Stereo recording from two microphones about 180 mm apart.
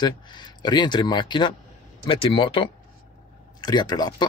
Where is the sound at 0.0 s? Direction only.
25° left (ahead or behind).